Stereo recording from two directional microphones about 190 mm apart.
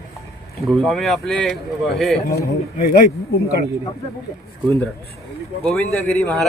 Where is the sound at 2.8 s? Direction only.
50° left (ahead or behind).